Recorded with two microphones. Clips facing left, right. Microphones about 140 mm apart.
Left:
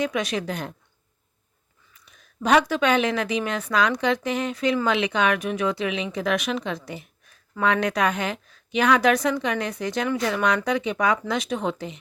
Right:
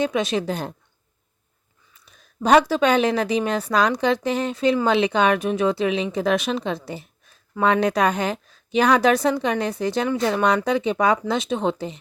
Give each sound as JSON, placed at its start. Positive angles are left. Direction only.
{"t": 0.0, "sound": "speech", "side_deg": -30}
{"t": 2.0, "sound": "a woman's voice", "side_deg": -35}